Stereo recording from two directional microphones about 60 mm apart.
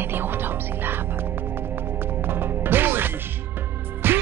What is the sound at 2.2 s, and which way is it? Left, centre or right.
Music, right.